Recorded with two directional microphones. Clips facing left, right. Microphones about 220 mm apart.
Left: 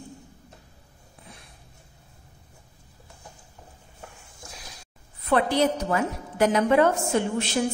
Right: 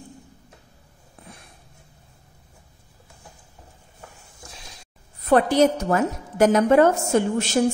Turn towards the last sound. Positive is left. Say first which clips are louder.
# right 4 dB
turn(degrees=-45)  # may be behind; listen again after turning